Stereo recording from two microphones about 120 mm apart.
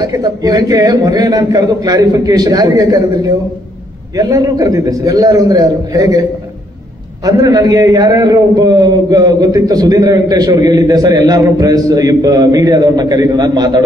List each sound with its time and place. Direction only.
0.0 s a man's voice: 30° right (ahead or behind)
7.2 s a man's voice: 30° right (ahead or behind)